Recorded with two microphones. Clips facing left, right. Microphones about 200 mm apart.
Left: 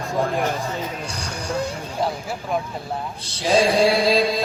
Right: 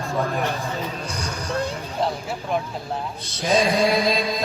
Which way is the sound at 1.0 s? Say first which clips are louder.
Right 1 dB; 30° left (ahead or behind).